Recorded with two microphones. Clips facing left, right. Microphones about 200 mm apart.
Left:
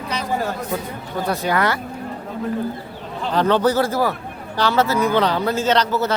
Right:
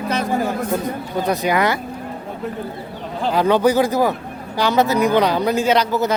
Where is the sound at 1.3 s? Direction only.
15° right (ahead or behind).